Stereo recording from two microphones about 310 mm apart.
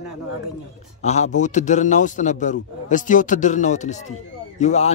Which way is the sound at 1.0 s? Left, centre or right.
Left.